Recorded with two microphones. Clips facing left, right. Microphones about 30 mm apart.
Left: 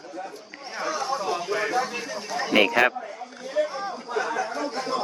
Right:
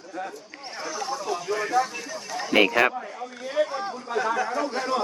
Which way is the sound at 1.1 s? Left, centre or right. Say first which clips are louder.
Right 1 dB; left.